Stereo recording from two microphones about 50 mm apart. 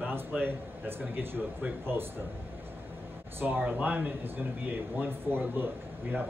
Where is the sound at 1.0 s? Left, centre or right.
Right.